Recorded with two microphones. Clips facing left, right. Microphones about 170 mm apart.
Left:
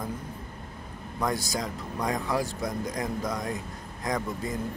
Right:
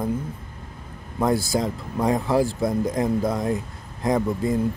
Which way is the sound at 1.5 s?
25° right (ahead or behind).